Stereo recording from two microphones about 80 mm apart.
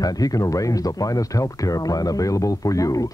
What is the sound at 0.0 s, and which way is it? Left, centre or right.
Speech, left.